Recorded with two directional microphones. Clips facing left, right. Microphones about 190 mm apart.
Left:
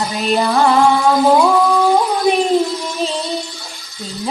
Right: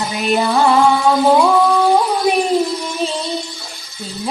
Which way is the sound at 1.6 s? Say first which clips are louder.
Even; centre (ahead or behind).